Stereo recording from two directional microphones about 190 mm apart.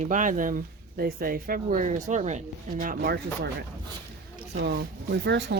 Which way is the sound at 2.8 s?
50° right (ahead or behind).